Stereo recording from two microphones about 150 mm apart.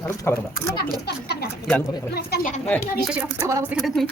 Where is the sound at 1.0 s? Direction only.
90° left.